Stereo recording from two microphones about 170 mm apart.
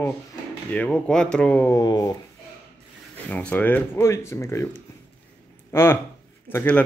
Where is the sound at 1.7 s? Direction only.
20° left (ahead or behind).